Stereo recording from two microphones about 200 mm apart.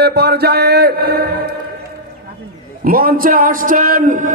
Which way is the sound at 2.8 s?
45° right (ahead or behind).